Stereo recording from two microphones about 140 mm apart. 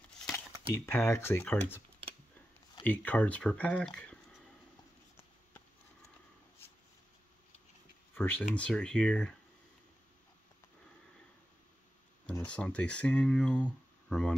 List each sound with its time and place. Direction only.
0.8 s speech: 15° left (ahead or behind)
2.8 s speech: 10° left (ahead or behind)
8.1 s speech: 15° left (ahead or behind)
12.3 s speech: 10° left (ahead or behind)